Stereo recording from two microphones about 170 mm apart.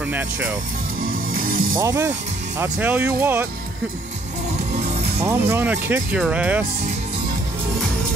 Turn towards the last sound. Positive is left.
turn(degrees=-10)  # may be behind; listen again after turning